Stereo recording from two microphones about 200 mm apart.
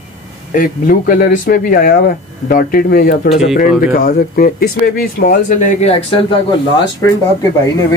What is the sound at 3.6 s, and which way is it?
Speech, 45° left (ahead or behind).